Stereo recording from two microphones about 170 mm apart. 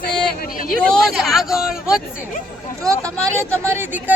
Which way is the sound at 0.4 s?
55° left (ahead or behind).